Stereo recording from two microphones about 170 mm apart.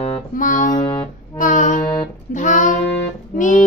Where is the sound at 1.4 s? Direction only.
50° left (ahead or behind).